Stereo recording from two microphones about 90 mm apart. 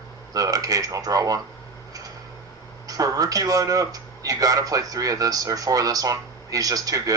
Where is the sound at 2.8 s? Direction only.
40° right (ahead or behind).